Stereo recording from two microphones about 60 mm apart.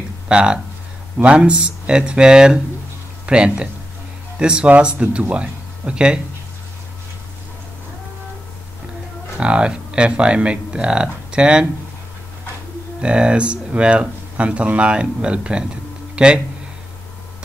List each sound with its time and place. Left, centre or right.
0.3 s speech: centre
9.4 s speech: centre
13.0 s speech: centre